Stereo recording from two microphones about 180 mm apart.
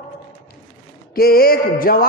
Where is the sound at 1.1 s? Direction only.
55° left (ahead or behind).